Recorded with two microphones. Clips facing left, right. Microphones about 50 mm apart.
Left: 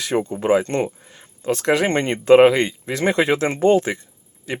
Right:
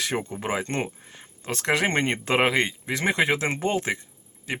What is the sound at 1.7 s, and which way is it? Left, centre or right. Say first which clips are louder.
Speech: left 4 dB; right.